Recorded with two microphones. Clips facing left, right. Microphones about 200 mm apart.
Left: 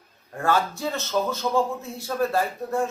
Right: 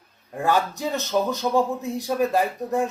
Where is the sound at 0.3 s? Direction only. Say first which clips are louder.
Right 1 dB; 15° right (ahead or behind).